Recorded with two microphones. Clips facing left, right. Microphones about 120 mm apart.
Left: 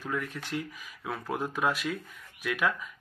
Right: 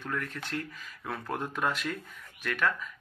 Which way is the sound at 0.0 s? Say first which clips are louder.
Left 1 dB; 5° left (ahead or behind).